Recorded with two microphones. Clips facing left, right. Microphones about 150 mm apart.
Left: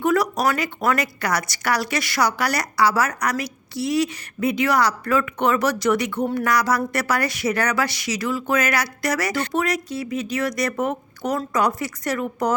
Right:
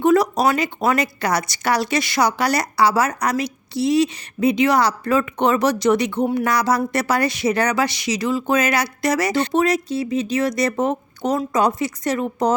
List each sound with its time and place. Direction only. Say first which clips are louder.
0.0 s speech: right 4 dB; 25° right (ahead or behind)